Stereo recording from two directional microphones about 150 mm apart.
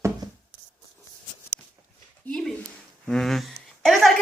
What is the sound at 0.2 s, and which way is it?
Writing, 25° right (ahead or behind).